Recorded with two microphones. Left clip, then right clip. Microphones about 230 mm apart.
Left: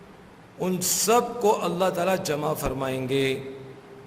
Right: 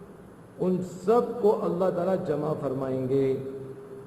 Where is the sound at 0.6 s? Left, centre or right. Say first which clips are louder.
Left 2 dB; left.